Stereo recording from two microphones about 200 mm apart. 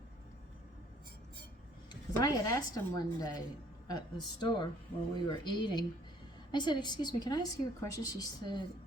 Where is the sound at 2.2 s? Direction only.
20° left (ahead or behind).